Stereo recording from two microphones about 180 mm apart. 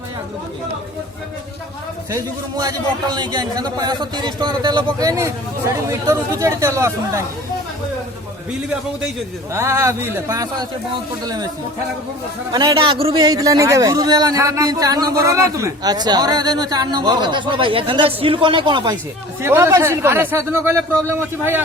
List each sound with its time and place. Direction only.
2.0 s a man's voice: 20° right (ahead or behind)
9.5 s speech: 15° right (ahead or behind)
12.5 s a man's voice: 25° right (ahead or behind)
19.4 s speech: 15° right (ahead or behind)